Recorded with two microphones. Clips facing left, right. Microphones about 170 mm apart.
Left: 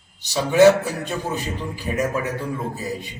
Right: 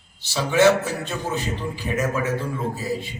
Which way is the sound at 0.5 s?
15° left (ahead or behind).